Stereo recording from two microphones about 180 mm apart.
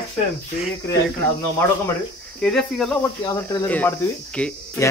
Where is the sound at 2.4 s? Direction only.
5° left (ahead or behind).